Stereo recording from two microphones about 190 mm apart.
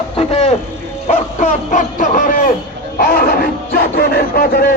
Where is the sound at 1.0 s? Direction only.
40° left (ahead or behind).